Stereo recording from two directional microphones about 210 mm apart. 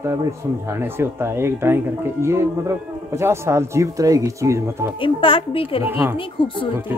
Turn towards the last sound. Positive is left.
turn(degrees=25)  # may be behind; listen again after turning